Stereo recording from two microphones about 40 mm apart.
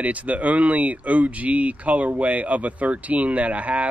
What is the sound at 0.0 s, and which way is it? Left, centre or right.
Speech, right.